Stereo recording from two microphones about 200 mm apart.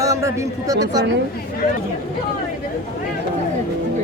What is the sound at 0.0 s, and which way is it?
A man's voice, 15° right (ahead or behind).